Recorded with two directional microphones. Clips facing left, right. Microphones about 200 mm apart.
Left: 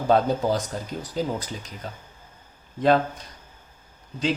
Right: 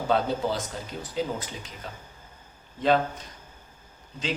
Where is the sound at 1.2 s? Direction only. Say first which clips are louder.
Left 2 dB; 40° left (ahead or behind).